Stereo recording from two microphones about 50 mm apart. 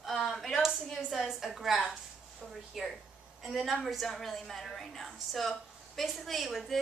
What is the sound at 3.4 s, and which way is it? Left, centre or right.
A woman's voice, centre.